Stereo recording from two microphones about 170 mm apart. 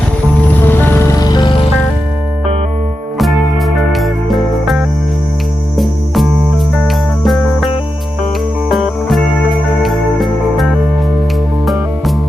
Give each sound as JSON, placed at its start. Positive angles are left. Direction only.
{"t": 0.6, "sound": "music", "side_deg": 10}
{"t": 3.9, "sound": "music", "side_deg": 0}
{"t": 5.7, "sound": "cricket", "side_deg": 0}
{"t": 6.7, "sound": "music", "side_deg": 0}
{"t": 8.7, "sound": "music", "side_deg": 0}
{"t": 11.6, "sound": "music", "side_deg": 0}